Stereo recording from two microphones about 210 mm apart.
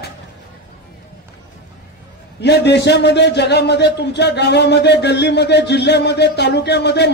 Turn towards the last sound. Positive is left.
turn(degrees=55)  # may be behind; listen again after turning